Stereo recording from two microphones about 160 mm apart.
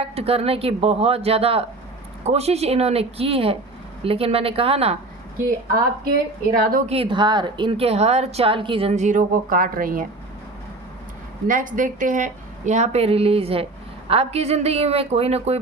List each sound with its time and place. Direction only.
0.0 s a woman's voice: 40° right (ahead or behind)
6.1 s a woman's voice: 70° right (ahead or behind)
6.8 s a woman's voice: 35° right (ahead or behind); by 10.1 s 60° right (ahead or behind)
11.4 s a woman's voice: 55° right (ahead or behind); by 15.5 s 40° right (ahead or behind)